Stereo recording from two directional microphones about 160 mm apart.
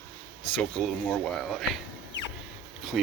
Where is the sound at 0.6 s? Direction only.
5° left (ahead or behind).